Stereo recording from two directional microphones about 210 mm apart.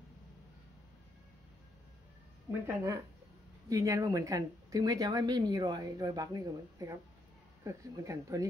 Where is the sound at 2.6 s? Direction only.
15° right (ahead or behind).